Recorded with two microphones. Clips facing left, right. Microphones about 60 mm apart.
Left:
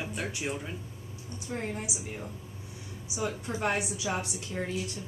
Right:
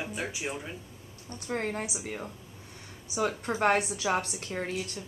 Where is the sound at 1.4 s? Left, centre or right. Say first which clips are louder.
Right 3 dB; right.